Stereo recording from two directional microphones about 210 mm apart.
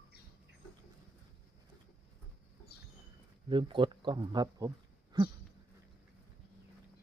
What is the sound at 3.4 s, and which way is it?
Speech, 25° right (ahead or behind).